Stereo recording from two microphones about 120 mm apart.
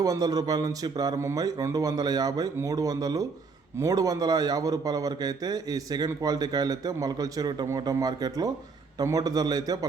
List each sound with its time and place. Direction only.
0.0 s speech: 30° right (ahead or behind)